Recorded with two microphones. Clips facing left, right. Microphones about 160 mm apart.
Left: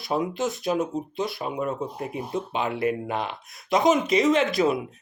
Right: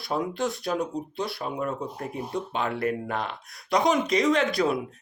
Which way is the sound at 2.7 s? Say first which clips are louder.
Left 3 dB; 5° left (ahead or behind).